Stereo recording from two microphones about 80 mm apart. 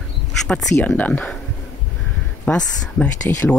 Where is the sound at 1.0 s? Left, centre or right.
Centre.